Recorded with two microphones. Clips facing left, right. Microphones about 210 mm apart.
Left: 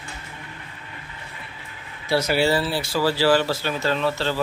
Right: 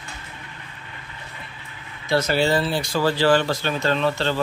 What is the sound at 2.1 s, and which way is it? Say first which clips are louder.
Speech: even; 10° left (ahead or behind).